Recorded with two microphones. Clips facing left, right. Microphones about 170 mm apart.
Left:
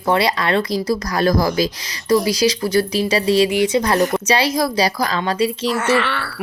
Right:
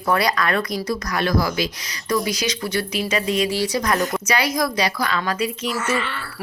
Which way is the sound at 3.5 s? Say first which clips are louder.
Left 5 dB; 20° left (ahead or behind).